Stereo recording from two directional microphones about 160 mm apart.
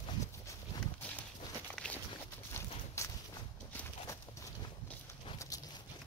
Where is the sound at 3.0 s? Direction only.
15° left (ahead or behind).